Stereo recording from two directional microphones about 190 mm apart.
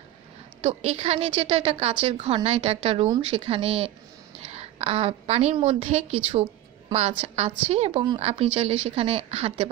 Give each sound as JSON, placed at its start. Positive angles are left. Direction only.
{"t": 0.6, "sound": "a woman's voice", "side_deg": -30}